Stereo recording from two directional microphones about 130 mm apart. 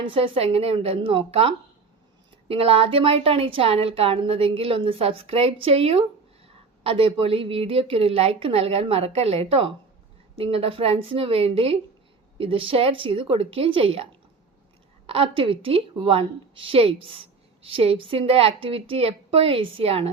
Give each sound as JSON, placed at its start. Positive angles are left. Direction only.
{"t": 0.0, "sound": "a woman's voice", "side_deg": -45}